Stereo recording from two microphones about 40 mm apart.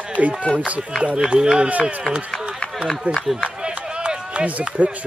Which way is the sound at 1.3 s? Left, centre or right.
Right.